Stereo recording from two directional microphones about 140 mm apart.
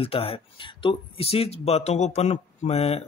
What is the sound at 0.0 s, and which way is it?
Speech, 45° left (ahead or behind).